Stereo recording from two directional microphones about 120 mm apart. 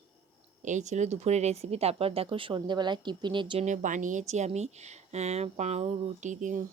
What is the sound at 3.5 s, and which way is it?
Speech, 85° right.